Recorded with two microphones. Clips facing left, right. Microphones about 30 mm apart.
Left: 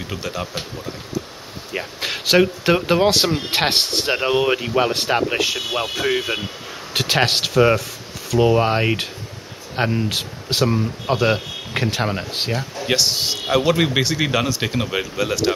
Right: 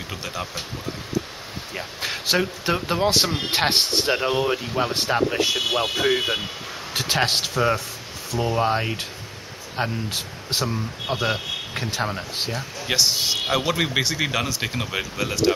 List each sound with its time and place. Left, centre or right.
0.1 s speech: centre
1.7 s a man's voice: left
6.9 s speech: left
10.0 s speech: left
10.7 s speech: left
12.5 s a man's voice: centre